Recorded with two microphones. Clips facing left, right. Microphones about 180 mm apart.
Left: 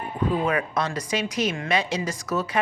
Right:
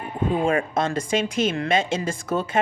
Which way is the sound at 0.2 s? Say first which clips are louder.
Right 2 dB; 25° right (ahead or behind).